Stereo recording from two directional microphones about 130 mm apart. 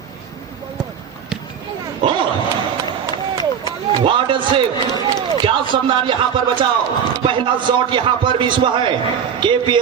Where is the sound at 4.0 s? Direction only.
40° right (ahead or behind).